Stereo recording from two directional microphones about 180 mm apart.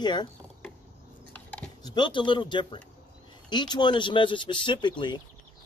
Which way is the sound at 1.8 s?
25° left (ahead or behind).